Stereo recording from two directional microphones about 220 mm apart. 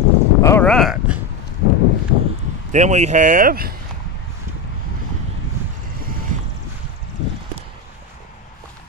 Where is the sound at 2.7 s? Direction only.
30° right (ahead or behind).